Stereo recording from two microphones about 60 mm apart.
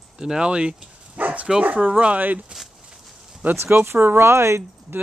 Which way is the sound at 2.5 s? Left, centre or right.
Centre.